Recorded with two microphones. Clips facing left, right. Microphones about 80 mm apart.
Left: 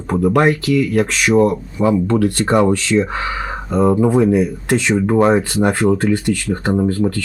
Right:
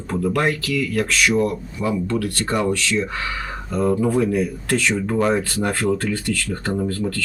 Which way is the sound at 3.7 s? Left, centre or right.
Left.